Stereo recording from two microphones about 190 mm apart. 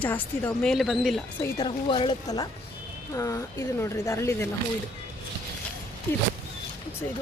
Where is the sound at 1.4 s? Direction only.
25° left (ahead or behind).